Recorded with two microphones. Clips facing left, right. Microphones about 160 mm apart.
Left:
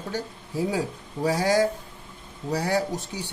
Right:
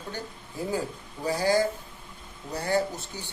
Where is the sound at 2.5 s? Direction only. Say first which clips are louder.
Left 2 dB; 75° left (ahead or behind).